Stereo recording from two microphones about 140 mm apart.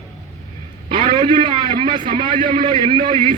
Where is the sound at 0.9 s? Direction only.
35° right (ahead or behind).